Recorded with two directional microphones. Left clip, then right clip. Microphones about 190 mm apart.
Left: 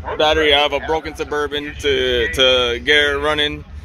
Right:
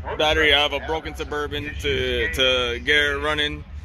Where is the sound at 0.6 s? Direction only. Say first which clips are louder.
Left 5 dB; 20° left (ahead or behind).